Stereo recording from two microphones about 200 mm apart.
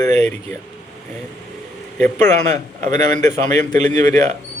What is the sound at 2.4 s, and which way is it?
A man's voice, 35° right (ahead or behind).